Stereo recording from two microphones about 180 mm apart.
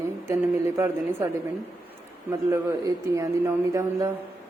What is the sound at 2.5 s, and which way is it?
A woman's voice, 15° right (ahead or behind).